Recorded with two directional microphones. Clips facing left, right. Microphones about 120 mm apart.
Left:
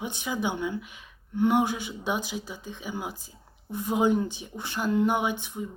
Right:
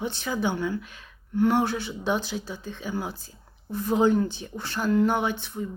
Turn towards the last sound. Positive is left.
turn(degrees=15)  # may be behind; listen again after turning